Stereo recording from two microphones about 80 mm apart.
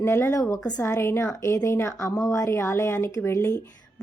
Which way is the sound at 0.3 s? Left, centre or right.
Left.